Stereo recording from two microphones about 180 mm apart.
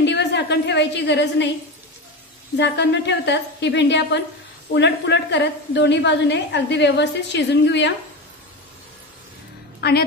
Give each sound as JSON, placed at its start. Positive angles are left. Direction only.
{"t": 0.0, "sound": "a woman's voice", "side_deg": 75}
{"t": 2.5, "sound": "a woman's voice", "side_deg": 75}
{"t": 9.8, "sound": "a woman's voice", "side_deg": 60}